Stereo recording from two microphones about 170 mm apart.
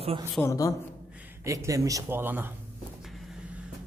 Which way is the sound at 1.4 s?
20° right (ahead or behind).